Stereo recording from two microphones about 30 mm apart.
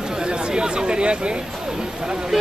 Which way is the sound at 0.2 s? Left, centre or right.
Right.